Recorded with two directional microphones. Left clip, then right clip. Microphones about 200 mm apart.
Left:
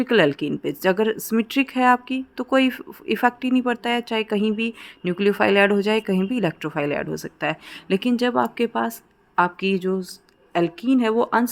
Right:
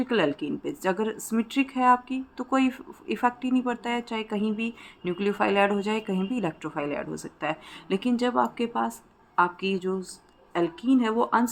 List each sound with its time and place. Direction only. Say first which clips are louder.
0.0 s speech: left 7 dB; 45° left (ahead or behind)